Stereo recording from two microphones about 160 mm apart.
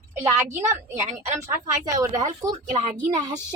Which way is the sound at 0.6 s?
20° right (ahead or behind).